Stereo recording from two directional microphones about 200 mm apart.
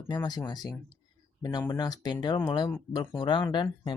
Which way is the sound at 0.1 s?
20° left (ahead or behind).